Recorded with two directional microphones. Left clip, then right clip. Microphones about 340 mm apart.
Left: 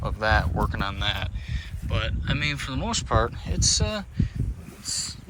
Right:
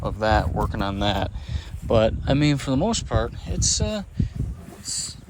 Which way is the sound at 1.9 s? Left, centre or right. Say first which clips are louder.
Right 11 dB; centre.